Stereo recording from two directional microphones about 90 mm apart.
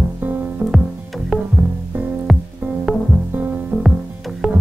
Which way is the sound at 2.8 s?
15° right (ahead or behind).